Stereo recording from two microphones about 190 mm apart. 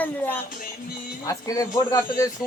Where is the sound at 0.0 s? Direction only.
10° left (ahead or behind).